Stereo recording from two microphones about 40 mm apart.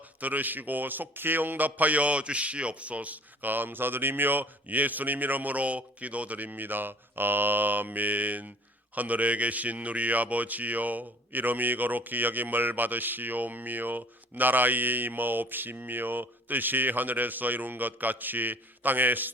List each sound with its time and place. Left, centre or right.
0.2 s a man's voice: right